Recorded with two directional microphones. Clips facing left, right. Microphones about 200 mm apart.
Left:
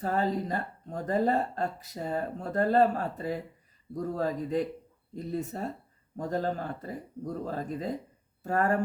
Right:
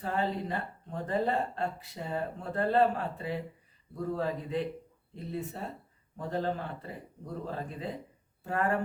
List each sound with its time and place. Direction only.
0.0 s speech: 40° left (ahead or behind)